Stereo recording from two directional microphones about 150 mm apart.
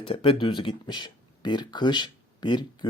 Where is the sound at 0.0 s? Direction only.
35° left (ahead or behind).